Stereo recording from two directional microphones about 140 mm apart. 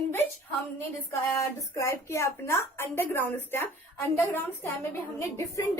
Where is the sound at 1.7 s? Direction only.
20° left (ahead or behind).